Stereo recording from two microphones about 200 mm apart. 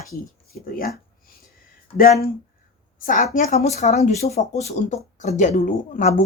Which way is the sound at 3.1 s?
40° left (ahead or behind).